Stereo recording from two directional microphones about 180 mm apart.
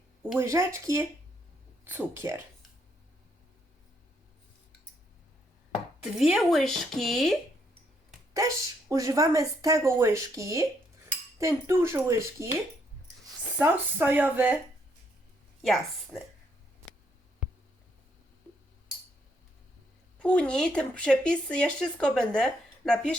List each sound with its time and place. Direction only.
0.2 s speech: 10° right (ahead or behind)
6.0 s speech: 5° right (ahead or behind)
8.9 s speech: 15° right (ahead or behind)
13.6 s speech: 10° right (ahead or behind)
15.6 s speech: centre (ahead or behind)
20.1 s speech: 5° left (ahead or behind)